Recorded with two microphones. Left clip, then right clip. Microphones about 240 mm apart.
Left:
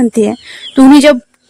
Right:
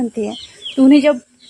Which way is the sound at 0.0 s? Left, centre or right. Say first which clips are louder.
Left 10 dB; left.